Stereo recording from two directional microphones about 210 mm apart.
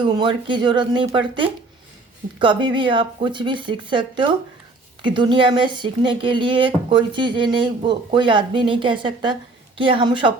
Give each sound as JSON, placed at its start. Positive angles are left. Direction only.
{"t": 0.0, "sound": "speech", "side_deg": -20}